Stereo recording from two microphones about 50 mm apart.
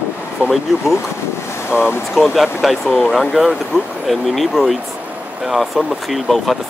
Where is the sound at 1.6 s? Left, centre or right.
Left.